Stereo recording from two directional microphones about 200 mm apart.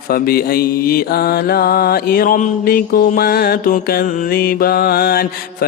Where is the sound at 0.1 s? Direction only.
50° left (ahead or behind).